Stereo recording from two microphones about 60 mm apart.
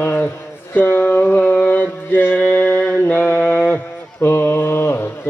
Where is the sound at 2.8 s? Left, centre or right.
Left.